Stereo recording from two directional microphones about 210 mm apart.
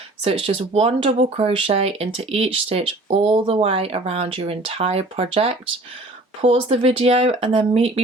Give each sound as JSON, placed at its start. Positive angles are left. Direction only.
{"t": 0.4, "sound": "speech", "side_deg": -30}